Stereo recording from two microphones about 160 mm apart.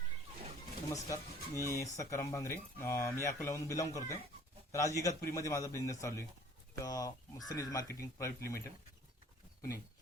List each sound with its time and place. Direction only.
0.9 s speech: 20° left (ahead or behind)